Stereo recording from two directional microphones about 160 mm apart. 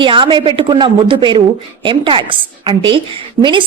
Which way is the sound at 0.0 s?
30° right (ahead or behind).